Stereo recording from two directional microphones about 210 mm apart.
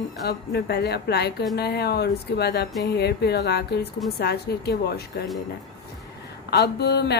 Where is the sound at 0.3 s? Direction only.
50° left (ahead or behind).